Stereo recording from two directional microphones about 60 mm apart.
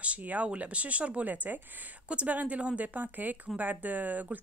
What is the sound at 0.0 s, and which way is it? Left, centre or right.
A woman's voice, right.